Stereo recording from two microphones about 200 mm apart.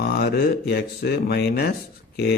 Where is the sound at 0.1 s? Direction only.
50° left (ahead or behind).